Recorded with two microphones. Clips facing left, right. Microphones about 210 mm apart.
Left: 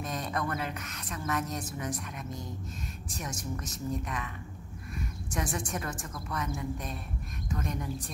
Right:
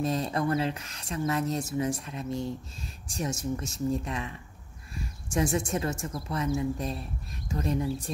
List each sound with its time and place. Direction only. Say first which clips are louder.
0.0 s a woman's voice: right 6 dB; 30° right (ahead or behind)